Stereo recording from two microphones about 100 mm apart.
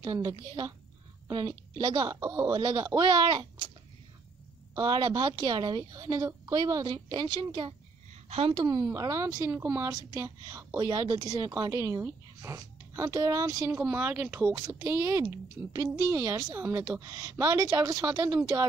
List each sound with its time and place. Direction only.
0.0 s a woman's voice: 50° right (ahead or behind)
2.5 s a woman's voice: 50° right (ahead or behind)
4.7 s a woman's voice: 50° right (ahead or behind)
8.3 s a woman's voice: 75° right (ahead or behind)
8.6 s speech: 35° right (ahead or behind)
10.8 s speech: 45° right (ahead or behind)
13.7 s speech: 15° right (ahead or behind)
14.5 s speech: 30° right (ahead or behind)